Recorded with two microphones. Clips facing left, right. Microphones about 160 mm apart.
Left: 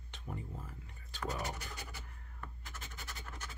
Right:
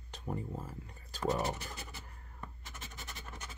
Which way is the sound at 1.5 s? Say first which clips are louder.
Right 2 dB; 25° right (ahead or behind).